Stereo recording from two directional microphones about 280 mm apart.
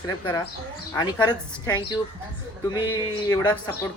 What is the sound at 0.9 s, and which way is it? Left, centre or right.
Speech, centre.